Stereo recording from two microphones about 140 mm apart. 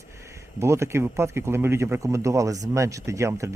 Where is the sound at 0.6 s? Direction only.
20° right (ahead or behind).